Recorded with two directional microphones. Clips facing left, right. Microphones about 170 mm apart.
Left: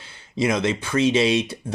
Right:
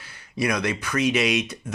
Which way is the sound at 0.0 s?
25° left (ahead or behind).